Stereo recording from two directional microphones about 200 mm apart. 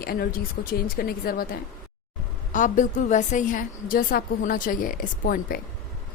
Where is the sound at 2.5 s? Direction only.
40° left (ahead or behind).